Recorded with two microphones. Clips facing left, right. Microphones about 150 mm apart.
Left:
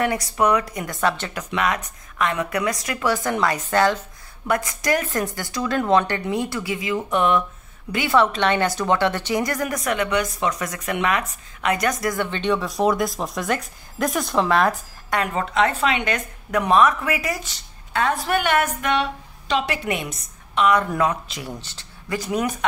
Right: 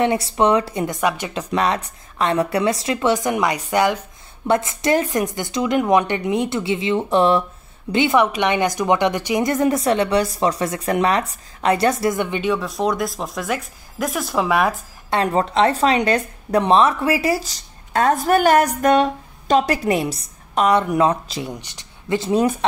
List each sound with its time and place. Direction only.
0.0 s speech: 25° right (ahead or behind)
1.0 s speech: 15° right (ahead or behind)
1.3 s speech: 30° right (ahead or behind); by 4.0 s 15° right (ahead or behind)
4.5 s speech: 25° right (ahead or behind)
7.9 s speech: 20° right (ahead or behind)
12.4 s speech: centre (ahead or behind)
15.0 s speech: 30° right (ahead or behind)
21.5 s speech: 15° right (ahead or behind)